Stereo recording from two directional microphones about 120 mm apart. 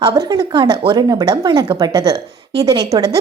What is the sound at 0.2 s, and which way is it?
A woman's voice, 35° right (ahead or behind).